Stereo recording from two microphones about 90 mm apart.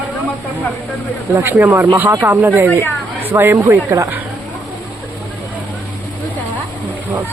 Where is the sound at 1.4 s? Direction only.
25° right (ahead or behind).